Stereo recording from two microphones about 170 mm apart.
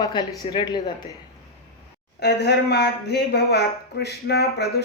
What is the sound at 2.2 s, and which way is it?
Speech, 80° left.